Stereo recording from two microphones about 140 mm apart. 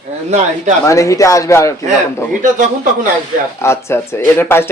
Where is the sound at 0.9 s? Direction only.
25° left (ahead or behind).